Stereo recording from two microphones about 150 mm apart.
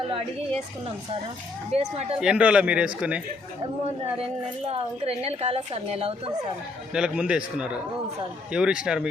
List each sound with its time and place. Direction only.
1.7 s speech: 45° right (ahead or behind)
2.2 s a man's voice: 5° right (ahead or behind)
4.2 s a woman's voice: 40° right (ahead or behind)
6.9 s a man's voice: 5° right (ahead or behind)